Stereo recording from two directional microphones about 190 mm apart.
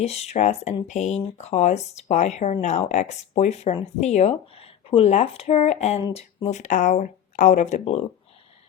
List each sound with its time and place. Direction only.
0.0 s speech: 35° left (ahead or behind)